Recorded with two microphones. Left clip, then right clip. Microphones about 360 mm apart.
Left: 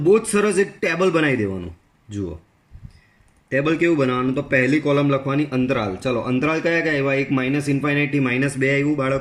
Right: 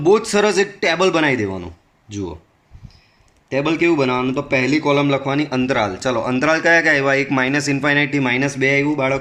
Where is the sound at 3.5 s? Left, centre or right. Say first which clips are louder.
Right 2 dB; centre.